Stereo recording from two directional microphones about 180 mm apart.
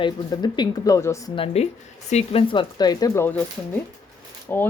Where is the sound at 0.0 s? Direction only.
25° left (ahead or behind).